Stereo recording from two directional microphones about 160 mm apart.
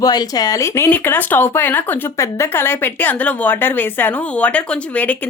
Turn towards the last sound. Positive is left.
turn(degrees=10)  # may be behind; listen again after turning